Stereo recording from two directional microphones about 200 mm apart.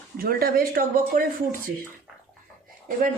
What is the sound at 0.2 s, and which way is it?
Speech, 50° right (ahead or behind).